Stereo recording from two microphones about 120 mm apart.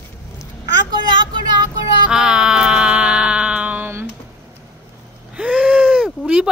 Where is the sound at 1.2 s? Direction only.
40° right (ahead or behind).